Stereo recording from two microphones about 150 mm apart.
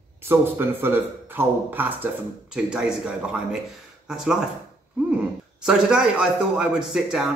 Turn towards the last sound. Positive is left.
turn(degrees=-5)  # may be behind; listen again after turning